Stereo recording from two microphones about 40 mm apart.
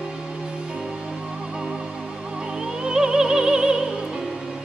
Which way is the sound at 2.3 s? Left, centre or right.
Right.